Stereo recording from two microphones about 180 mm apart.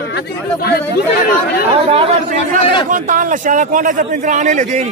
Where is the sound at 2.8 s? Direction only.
45° right (ahead or behind).